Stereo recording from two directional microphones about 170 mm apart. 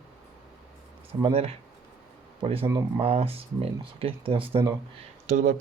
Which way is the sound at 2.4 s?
35° right (ahead or behind).